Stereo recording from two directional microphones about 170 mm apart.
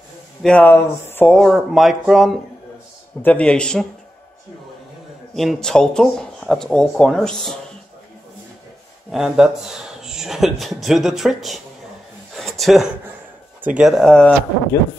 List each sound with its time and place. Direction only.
0.4 s a man's voice: 5° left (ahead or behind)
5.3 s speech: centre (ahead or behind)
9.1 s speech: centre (ahead or behind)
12.4 s a sound: centre (ahead or behind)
13.6 s speech: 5° right (ahead or behind)